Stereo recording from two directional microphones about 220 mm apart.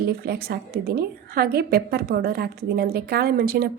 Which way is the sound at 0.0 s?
45° right (ahead or behind).